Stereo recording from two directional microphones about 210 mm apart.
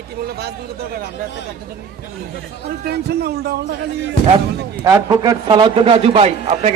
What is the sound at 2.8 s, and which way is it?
Speech, 50° right (ahead or behind).